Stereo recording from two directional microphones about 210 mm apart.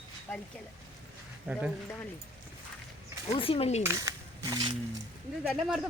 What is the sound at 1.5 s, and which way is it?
Speech, 5° right (ahead or behind).